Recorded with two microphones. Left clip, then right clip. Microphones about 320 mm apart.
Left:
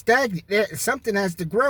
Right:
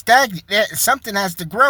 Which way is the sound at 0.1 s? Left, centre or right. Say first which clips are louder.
Right 6 dB; centre.